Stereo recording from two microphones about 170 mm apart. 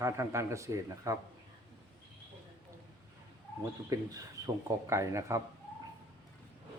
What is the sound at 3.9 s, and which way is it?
Speech, 20° right (ahead or behind).